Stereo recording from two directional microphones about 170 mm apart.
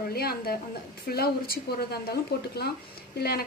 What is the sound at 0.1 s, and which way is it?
A woman's voice, 65° left (ahead or behind).